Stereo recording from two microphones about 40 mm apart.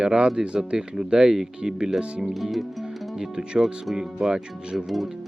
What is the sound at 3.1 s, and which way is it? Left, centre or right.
Speech, centre.